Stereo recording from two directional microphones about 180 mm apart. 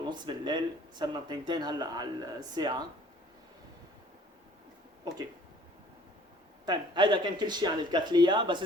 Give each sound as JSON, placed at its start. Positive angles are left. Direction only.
{"t": 0.0, "sound": "speech", "side_deg": -25}
{"t": 6.7, "sound": "speech", "side_deg": -25}